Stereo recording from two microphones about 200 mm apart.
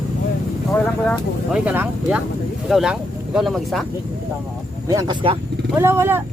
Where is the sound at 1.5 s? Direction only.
5° right (ahead or behind).